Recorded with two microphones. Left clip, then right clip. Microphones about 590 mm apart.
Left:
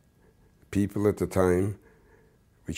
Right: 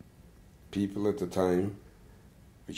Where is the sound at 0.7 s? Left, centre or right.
Left.